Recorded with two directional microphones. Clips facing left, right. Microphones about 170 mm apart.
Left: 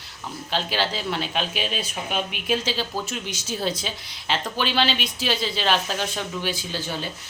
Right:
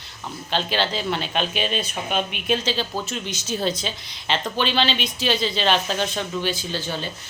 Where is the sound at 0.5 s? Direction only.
5° left (ahead or behind).